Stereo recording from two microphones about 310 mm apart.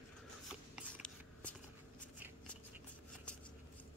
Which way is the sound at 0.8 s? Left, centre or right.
Centre.